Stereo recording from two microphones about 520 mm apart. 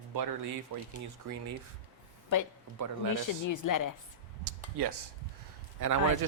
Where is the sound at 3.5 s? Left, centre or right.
Left.